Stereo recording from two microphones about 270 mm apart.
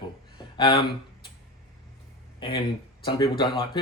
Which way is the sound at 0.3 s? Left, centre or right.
Centre.